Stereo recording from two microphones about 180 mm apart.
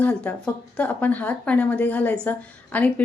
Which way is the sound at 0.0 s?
10° left (ahead or behind).